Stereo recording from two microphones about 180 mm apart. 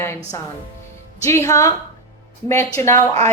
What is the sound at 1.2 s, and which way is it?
Speech, 15° left (ahead or behind).